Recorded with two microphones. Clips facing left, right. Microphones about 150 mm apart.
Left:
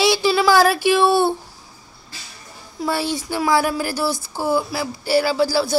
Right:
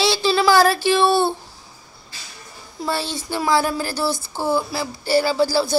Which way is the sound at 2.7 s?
10° left (ahead or behind).